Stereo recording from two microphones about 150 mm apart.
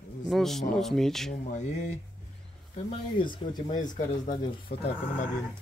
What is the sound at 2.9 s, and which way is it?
Speech, 30° left (ahead or behind).